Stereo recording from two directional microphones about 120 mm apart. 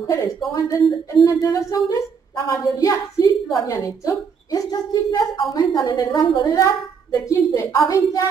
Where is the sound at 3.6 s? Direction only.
30° left (ahead or behind).